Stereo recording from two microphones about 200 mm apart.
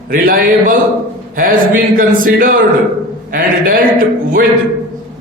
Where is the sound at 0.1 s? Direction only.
45° right (ahead or behind).